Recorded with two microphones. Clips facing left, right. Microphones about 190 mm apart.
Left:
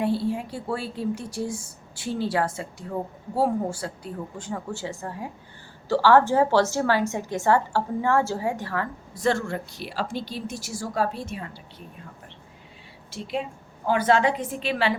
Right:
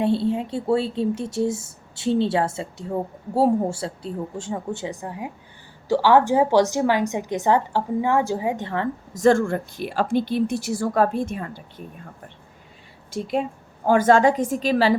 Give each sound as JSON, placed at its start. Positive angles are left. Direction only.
{"t": 0.0, "sound": "a woman's voice", "side_deg": -25}
{"t": 9.1, "sound": "speech", "side_deg": -45}
{"t": 13.8, "sound": "speech", "side_deg": -45}